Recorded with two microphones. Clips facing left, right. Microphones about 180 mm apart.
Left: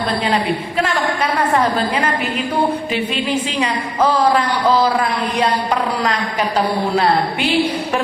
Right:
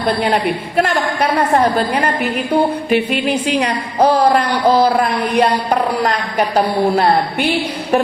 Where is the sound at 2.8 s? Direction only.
60° right (ahead or behind).